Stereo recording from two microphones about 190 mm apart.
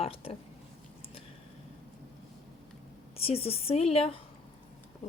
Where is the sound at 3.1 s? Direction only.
30° left (ahead or behind).